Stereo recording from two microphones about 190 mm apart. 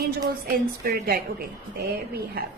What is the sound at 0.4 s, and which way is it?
Speech, 50° right (ahead or behind).